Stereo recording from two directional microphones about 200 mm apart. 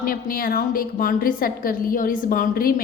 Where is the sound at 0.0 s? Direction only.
45° left (ahead or behind).